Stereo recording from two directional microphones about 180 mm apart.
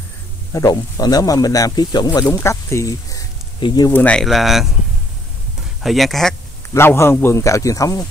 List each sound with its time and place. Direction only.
0.5 s speech: 20° left (ahead or behind)
2.3 s a sound: 15° left (ahead or behind)
3.9 s speech: 5° left (ahead or behind)
5.8 s speech: centre (ahead or behind)
6.7 s a man's voice: 15° left (ahead or behind)